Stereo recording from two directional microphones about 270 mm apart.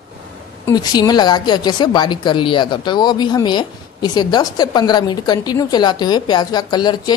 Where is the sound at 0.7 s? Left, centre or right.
Centre.